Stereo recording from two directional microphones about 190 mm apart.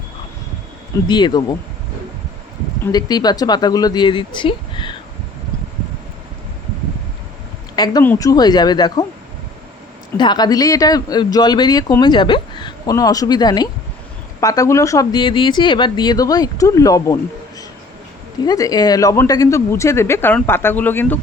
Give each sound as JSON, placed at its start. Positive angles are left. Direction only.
{"t": 1.0, "sound": "speech", "side_deg": 25}
{"t": 2.8, "sound": "speech", "side_deg": 20}
{"t": 8.0, "sound": "speech", "side_deg": 15}
{"t": 10.2, "sound": "speech", "side_deg": 20}
{"t": 18.4, "sound": "speech", "side_deg": 20}